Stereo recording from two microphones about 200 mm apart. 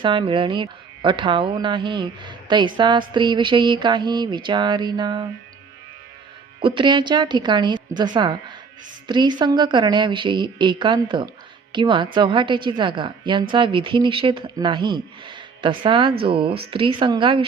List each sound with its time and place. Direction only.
0.0 s a woman's voice: 25° right (ahead or behind)
6.6 s a woman's voice: 25° right (ahead or behind)